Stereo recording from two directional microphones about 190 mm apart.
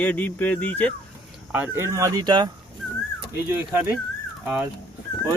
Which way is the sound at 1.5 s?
10° right (ahead or behind).